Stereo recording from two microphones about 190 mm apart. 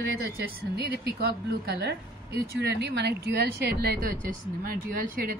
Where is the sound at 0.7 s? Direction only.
60° right (ahead or behind).